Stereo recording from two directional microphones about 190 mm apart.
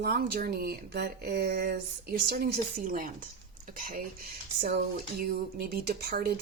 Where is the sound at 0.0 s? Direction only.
55° right (ahead or behind).